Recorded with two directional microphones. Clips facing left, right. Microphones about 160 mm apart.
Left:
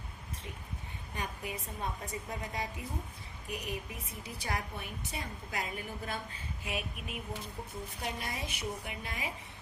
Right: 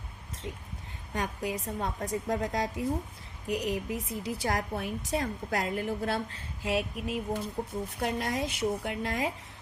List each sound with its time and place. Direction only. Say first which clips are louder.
1.1 s a woman's voice: right 7 dB; 90° right
7.6 s a woman's voice: right 9 dB; 45° right (ahead or behind)
8.0 s a woman's voice: right 9 dB; 85° right